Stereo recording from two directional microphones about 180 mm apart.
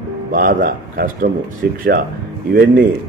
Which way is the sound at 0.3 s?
50° right (ahead or behind).